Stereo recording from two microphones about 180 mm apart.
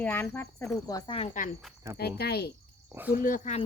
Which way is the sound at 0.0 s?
10° left (ahead or behind).